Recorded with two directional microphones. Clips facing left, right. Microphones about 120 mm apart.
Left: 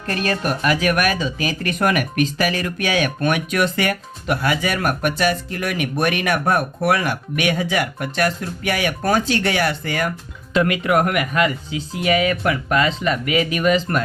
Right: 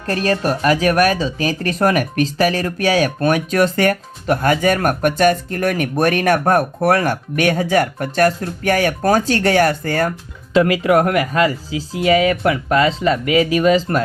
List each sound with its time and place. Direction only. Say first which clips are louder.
0.1 s speech: right 4 dB; 35° right (ahead or behind)
10.5 s speech: right 4 dB; 30° right (ahead or behind)